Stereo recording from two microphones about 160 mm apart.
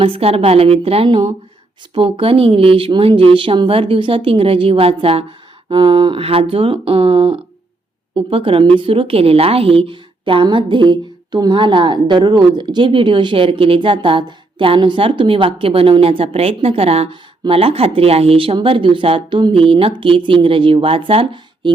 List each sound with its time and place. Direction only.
0.0 s a woman's voice: 35° right (ahead or behind)